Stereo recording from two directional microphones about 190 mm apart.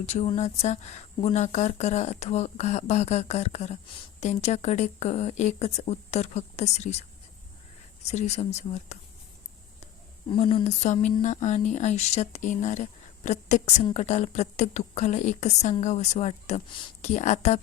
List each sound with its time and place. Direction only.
0.0 s speech: 35° left (ahead or behind)
8.0 s speech: 35° left (ahead or behind)
10.2 s speech: 30° left (ahead or behind)